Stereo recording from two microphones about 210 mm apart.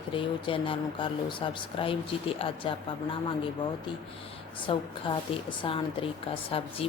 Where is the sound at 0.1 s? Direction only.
25° left (ahead or behind).